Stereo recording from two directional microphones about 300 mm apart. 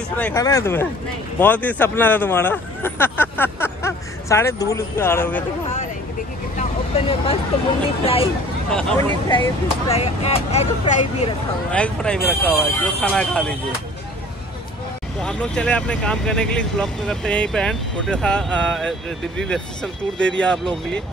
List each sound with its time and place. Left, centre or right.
0.2 s speech: centre
6.5 s vehicle: centre
8.0 s speech: centre
8.7 s speech: centre
9.3 s speech: centre
11.7 s speech: centre
15.2 s speech: centre